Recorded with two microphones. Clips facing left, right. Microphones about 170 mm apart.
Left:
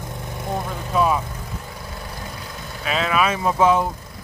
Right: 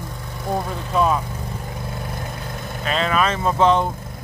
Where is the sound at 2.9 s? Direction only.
5° left (ahead or behind).